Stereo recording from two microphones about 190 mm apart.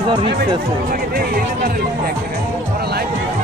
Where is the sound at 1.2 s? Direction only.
50° right (ahead or behind).